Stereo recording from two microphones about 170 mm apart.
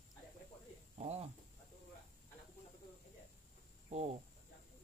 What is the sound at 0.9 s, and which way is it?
Speech, 40° right (ahead or behind).